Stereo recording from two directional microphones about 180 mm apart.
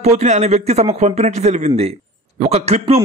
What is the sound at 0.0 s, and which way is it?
A man's voice, 40° right (ahead or behind).